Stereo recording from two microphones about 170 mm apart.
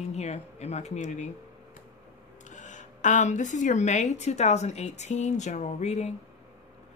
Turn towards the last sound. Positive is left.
turn(degrees=40)  # may be behind; listen again after turning